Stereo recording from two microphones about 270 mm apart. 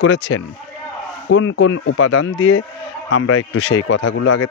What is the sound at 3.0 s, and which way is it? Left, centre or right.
Speech, left.